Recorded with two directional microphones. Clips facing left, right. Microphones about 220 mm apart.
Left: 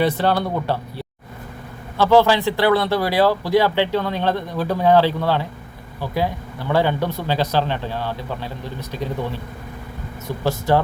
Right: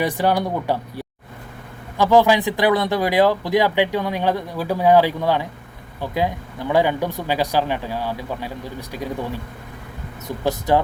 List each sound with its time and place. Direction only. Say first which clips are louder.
0.0 s speech: left 1 dB; 15° right (ahead or behind)